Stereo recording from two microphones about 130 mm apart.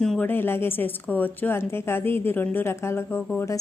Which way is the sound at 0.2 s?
15° left (ahead or behind).